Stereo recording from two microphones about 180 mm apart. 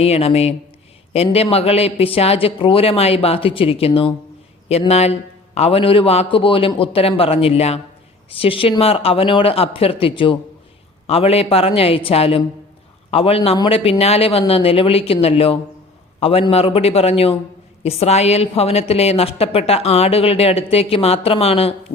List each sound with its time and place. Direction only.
0.0 s a woman's voice: 35° left (ahead or behind)